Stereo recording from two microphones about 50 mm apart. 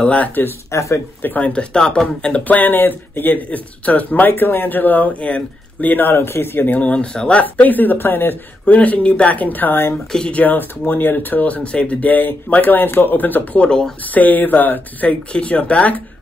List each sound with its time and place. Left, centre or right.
0.0 s speech: left
0.3 s speech: left
0.7 s speech: left
1.2 s speech: left
1.5 s speech: centre
2.4 s speech: left
3.4 s speech: left
6.8 s speech: left
8.6 s speech: left
13.6 s speech: centre
14.0 s speech: left
15.0 s speech: left